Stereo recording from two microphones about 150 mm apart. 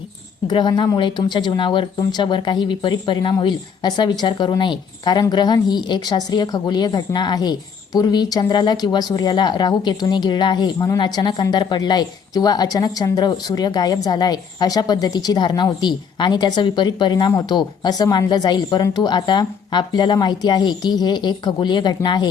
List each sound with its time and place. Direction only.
0.4 s speech: 30° left (ahead or behind)